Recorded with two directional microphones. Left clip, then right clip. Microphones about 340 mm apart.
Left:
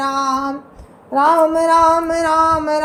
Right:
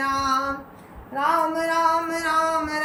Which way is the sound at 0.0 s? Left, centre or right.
Centre.